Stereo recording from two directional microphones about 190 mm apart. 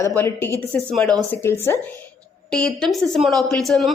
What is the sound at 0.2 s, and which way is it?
A woman's voice, 10° left (ahead or behind).